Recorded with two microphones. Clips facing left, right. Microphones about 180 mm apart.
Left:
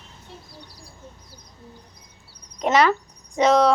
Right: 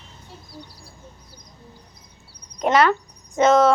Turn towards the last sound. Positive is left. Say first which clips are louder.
# right 2 dB
turn(degrees=0)  # may be behind; listen again after turning